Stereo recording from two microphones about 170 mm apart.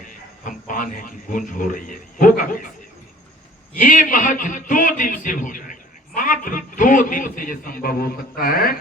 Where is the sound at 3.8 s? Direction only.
50° left (ahead or behind).